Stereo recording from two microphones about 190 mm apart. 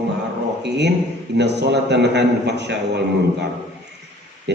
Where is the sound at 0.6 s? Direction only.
65° right (ahead or behind).